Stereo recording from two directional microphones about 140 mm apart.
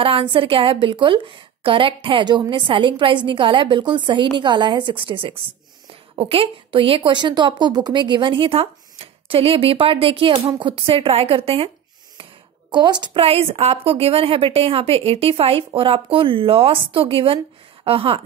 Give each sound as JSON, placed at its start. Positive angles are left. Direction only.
{"t": 0.0, "sound": "a woman's voice", "side_deg": -40}
{"t": 12.7, "sound": "a woman's voice", "side_deg": -35}